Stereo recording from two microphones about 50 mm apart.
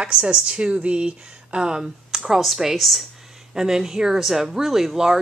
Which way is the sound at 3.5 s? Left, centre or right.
Centre.